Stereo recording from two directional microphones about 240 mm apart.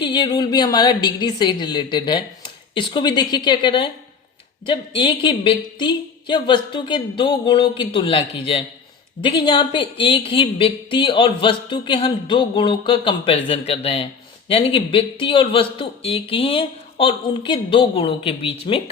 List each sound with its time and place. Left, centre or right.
0.0 s a woman's voice: centre